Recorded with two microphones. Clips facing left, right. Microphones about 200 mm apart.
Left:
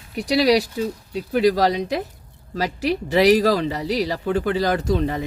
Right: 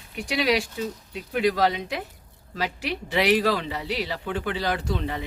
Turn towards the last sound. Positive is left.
turn(degrees=40)  # may be behind; listen again after turning